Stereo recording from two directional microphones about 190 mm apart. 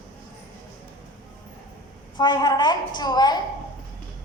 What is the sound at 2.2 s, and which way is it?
A man's voice, 20° left (ahead or behind).